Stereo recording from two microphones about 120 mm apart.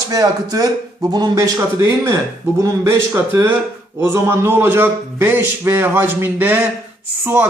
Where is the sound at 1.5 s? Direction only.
25° right (ahead or behind).